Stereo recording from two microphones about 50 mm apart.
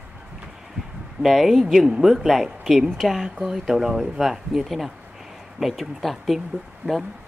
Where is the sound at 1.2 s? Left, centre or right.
Centre.